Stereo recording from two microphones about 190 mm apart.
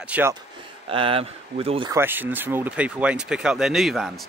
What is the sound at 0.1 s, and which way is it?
Speech, 10° right (ahead or behind).